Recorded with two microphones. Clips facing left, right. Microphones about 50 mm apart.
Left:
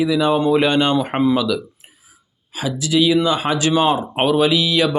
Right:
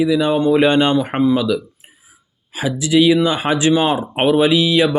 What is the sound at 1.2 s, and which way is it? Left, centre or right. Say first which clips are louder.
Speech: right 1 dB; centre.